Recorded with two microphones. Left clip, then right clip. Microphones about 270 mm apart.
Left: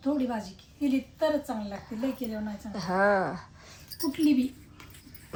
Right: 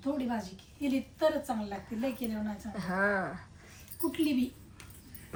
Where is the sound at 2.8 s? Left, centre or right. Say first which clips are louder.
Left 6 dB; centre.